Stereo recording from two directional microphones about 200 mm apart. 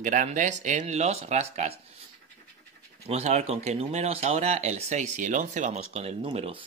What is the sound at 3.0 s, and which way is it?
Speech, 30° right (ahead or behind).